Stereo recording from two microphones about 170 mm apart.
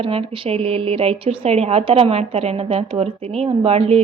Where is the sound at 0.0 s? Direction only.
35° right (ahead or behind).